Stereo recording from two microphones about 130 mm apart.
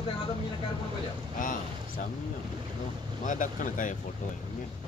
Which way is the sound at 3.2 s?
85° left.